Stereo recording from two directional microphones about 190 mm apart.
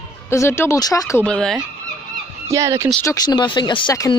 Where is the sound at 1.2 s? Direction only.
5° left (ahead or behind).